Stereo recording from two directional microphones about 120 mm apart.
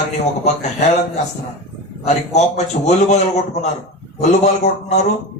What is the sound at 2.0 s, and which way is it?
A man's voice, 70° left (ahead or behind).